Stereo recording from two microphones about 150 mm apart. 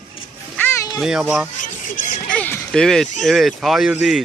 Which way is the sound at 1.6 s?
55° left (ahead or behind).